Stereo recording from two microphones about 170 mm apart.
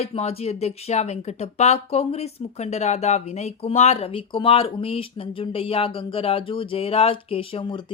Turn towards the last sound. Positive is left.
turn(degrees=30)  # may be behind; listen again after turning